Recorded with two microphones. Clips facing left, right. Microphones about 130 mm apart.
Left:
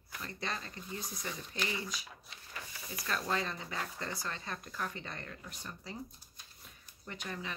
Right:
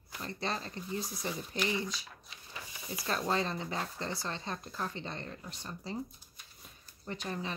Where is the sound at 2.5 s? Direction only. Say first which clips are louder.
Right 1 dB; 20° right (ahead or behind).